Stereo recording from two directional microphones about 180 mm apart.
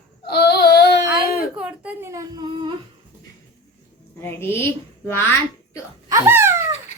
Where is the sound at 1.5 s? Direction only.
5° right (ahead or behind); by 2.7 s 25° right (ahead or behind).